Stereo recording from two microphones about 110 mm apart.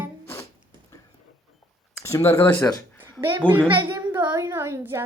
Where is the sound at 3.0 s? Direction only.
20° right (ahead or behind).